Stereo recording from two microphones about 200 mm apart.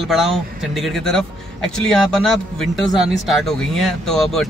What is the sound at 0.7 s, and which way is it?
A man's voice, centre (ahead or behind).